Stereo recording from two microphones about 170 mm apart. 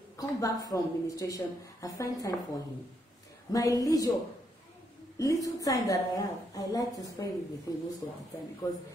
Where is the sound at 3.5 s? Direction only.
20° left (ahead or behind).